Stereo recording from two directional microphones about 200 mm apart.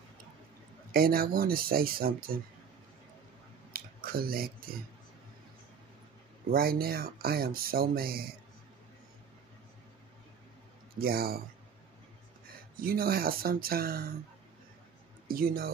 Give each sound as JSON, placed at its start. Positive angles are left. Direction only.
{"t": 0.9, "sound": "speech", "side_deg": -45}
{"t": 3.7, "sound": "a sound", "side_deg": -50}
{"t": 6.5, "sound": "speech", "side_deg": -50}
{"t": 11.0, "sound": "speech", "side_deg": -50}
{"t": 12.4, "sound": "speech", "side_deg": -50}
{"t": 15.2, "sound": "speech", "side_deg": -45}